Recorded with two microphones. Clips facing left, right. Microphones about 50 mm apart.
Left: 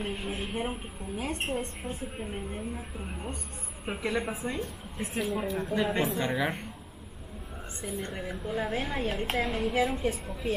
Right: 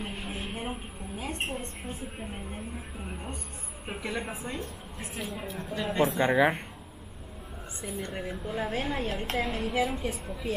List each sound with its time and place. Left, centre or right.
0.0 s a sound: centre
1.2 s a woman's voice: centre
6.1 s speech: centre
7.8 s a woman's voice: centre